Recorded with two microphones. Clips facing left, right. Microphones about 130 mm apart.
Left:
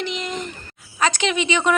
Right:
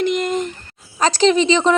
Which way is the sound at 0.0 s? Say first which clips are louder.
Right 9 dB; 50° right (ahead or behind).